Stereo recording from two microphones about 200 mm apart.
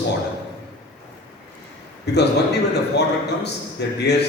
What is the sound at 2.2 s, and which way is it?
A man's voice, 55° left (ahead or behind).